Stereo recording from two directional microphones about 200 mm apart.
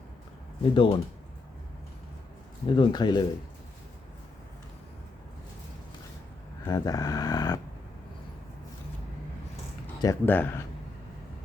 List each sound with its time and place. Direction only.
0.7 s speech: 25° left (ahead or behind)
2.6 s speech: 25° left (ahead or behind)
6.7 s speech: 20° left (ahead or behind)
10.0 s speech: 15° left (ahead or behind)